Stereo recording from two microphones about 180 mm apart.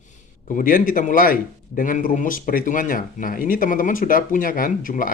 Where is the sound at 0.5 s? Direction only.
50° left (ahead or behind).